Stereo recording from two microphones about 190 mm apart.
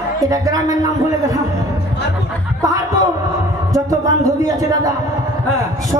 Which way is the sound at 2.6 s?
20° right (ahead or behind).